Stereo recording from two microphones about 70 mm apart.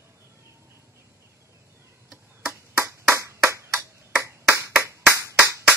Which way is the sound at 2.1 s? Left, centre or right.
Right.